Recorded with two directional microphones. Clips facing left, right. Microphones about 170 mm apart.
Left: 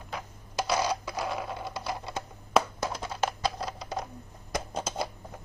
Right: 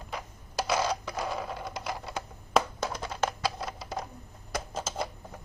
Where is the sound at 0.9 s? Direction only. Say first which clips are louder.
Left 1 dB; 10° left (ahead or behind).